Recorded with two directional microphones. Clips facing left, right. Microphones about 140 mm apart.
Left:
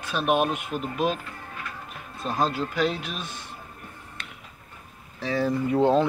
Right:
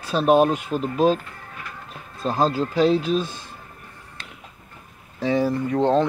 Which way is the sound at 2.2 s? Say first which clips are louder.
Right 5 dB; 30° right (ahead or behind).